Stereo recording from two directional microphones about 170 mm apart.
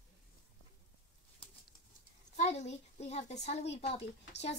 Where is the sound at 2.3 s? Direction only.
40° left (ahead or behind).